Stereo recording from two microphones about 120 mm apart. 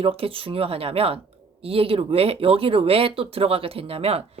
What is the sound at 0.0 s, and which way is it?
Speech, 50° right (ahead or behind).